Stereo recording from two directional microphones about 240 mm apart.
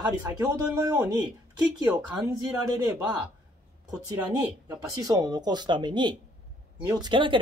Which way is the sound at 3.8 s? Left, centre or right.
Centre.